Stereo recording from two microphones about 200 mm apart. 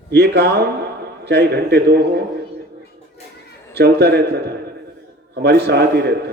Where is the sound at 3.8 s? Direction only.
55° right (ahead or behind).